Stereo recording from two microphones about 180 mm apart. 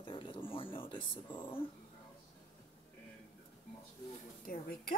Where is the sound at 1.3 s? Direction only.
10° left (ahead or behind).